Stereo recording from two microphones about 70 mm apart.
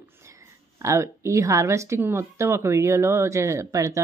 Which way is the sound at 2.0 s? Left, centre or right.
Right.